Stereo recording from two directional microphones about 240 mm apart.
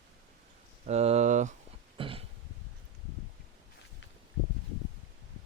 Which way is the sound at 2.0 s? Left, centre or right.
Right.